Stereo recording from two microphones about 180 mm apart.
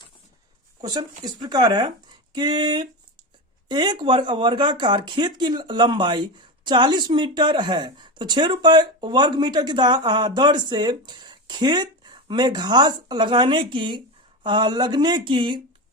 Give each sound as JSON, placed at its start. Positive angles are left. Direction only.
{"t": 0.8, "sound": "speech", "side_deg": -20}